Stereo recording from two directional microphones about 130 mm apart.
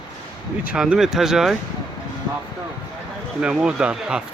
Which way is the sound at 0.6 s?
10° right (ahead or behind).